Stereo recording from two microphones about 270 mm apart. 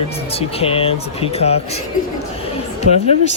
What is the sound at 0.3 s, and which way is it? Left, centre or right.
Speech, left.